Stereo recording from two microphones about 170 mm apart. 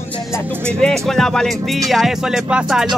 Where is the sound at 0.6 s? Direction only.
5° left (ahead or behind).